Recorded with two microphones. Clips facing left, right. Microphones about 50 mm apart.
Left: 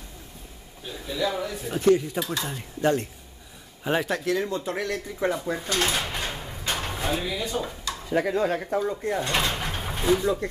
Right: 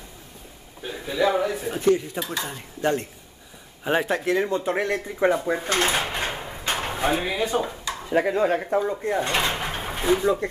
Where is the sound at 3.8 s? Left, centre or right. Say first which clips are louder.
Right 2 dB; centre.